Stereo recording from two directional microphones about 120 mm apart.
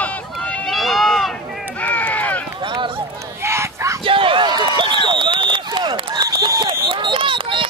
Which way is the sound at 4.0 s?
45° right (ahead or behind).